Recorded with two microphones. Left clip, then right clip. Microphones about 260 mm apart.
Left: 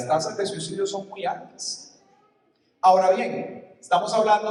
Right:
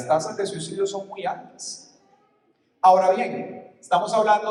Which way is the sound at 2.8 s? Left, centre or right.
Right.